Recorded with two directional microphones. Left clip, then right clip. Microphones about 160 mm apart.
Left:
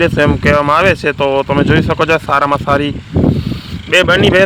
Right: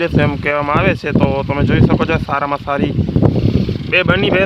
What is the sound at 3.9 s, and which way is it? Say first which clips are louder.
Speech: left 5 dB; 25° left (ahead or behind).